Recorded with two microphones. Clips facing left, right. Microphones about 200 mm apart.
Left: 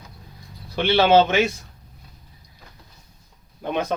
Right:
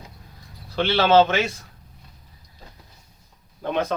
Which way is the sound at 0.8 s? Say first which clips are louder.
Left 1 dB; 15° left (ahead or behind).